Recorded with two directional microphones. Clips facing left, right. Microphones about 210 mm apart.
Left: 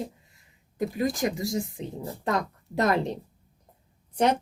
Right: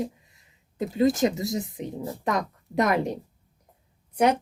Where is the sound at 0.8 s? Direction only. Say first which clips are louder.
Right 5 dB; 25° right (ahead or behind).